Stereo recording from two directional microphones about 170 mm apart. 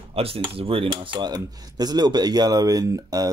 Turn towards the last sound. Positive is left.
turn(degrees=-20)  # may be behind; listen again after turning